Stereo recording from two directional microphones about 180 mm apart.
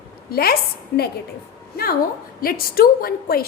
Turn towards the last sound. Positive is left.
turn(degrees=55)  # may be behind; listen again after turning